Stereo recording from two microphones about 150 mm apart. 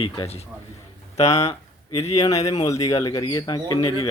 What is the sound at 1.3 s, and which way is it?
Speech, 20° left (ahead or behind).